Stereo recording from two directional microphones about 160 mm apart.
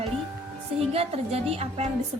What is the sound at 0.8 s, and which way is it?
A woman's voice, 40° right (ahead or behind).